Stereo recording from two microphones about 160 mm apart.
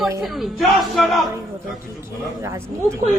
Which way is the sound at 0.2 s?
Centre (ahead or behind).